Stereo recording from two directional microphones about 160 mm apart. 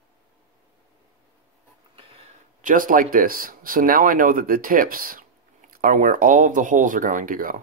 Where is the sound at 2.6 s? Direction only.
55° right (ahead or behind).